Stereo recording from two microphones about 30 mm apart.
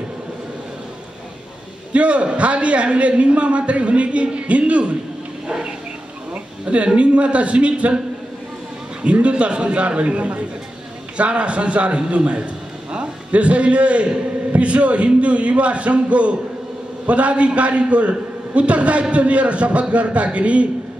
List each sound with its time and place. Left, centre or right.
1.9 s a man's voice: right
5.5 s a sound: right
6.3 s a sound: right
7.0 s a man's voice: right
9.0 s a man's voice: right
13.3 s a man's voice: right